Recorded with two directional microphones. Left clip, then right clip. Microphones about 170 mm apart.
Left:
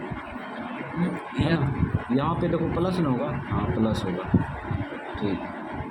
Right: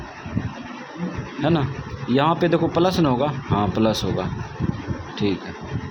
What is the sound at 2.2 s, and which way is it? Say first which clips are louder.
A man's voice: right 8 dB; 40° right (ahead or behind).